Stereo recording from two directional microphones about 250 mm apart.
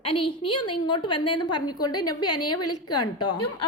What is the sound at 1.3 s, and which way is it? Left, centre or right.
A woman's voice, left.